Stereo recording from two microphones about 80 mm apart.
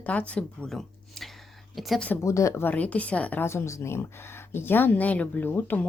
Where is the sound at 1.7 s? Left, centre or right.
Centre.